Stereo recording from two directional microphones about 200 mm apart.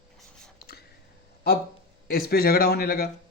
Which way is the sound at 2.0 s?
50° left (ahead or behind).